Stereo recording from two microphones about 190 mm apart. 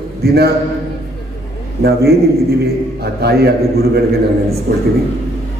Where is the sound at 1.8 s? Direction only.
55° right (ahead or behind).